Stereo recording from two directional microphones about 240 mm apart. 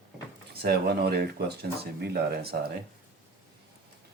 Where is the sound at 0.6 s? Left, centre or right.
Right.